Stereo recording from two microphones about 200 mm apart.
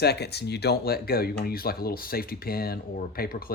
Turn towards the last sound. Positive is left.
turn(degrees=50)  # may be behind; listen again after turning